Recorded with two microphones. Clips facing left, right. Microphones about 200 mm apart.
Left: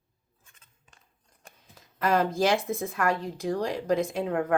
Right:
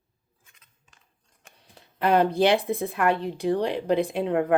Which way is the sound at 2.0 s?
65° right (ahead or behind).